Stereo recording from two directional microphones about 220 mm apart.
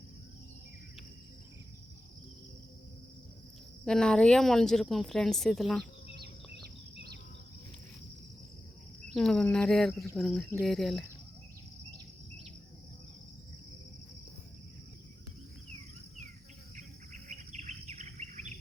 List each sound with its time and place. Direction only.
3.8 s speech: 5° left (ahead or behind)
9.1 s speech: centre (ahead or behind)
16.7 s bird: 35° right (ahead or behind)